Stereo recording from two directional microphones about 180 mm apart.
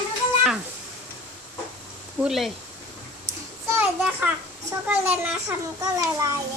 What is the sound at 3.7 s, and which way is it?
A child's voice, 5° right (ahead or behind).